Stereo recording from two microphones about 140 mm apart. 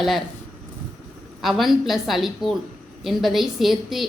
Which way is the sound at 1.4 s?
Centre (ahead or behind).